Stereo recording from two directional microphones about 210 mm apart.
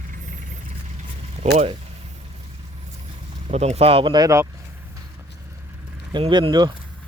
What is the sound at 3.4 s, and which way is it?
Speech, 30° right (ahead or behind).